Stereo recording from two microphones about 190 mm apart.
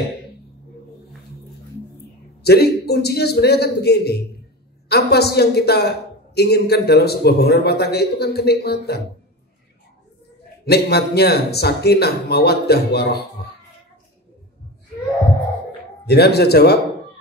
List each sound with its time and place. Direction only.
2.4 s a man's voice: 60° left (ahead or behind)
10.6 s a man's voice: 60° left (ahead or behind)
16.1 s a man's voice: 60° left (ahead or behind)